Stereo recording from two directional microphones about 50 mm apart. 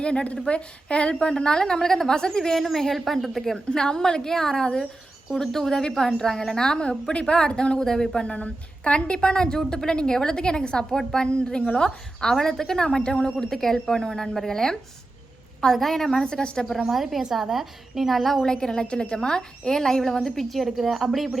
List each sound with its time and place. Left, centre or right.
0.0 s a woman's voice: left; by 3.6 s centre
3.7 s a woman's voice: centre
13.4 s a woman's voice: centre
16.8 s a woman's voice: centre
18.4 s a woman's voice: centre